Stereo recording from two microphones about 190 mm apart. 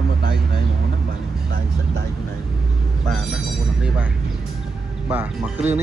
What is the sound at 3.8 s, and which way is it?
A man's voice, 5° right (ahead or behind).